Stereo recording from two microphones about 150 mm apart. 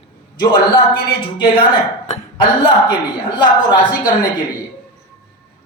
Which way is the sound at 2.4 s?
30° left (ahead or behind).